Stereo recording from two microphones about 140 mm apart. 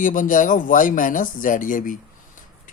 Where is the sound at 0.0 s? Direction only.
75° left (ahead or behind).